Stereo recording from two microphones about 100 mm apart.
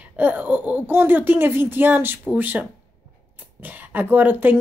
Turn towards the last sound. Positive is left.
turn(degrees=-20)  # may be behind; listen again after turning